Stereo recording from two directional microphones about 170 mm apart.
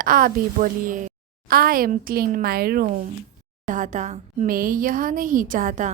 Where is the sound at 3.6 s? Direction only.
50° right (ahead or behind).